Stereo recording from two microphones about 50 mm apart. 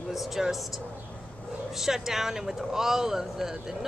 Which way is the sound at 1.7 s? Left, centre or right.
Centre.